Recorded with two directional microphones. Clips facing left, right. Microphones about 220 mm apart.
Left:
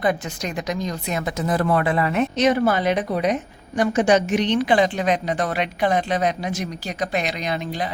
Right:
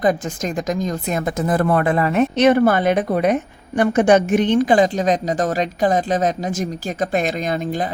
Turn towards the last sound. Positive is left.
turn(degrees=-45)  # may be behind; listen again after turning